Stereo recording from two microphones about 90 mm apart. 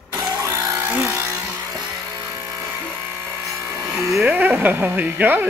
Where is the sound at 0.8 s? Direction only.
25° right (ahead or behind).